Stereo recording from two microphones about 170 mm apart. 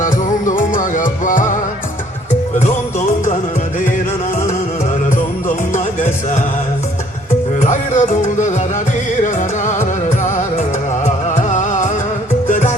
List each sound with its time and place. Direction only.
0.0 s music: 50° left (ahead or behind)
5.1 s music: 50° left (ahead or behind)
7.6 s music: 45° left (ahead or behind)